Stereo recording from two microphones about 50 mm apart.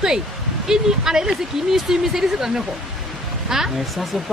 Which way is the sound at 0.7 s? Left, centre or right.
Centre.